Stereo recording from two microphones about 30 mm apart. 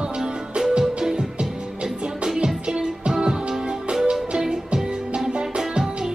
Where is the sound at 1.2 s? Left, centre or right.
Right.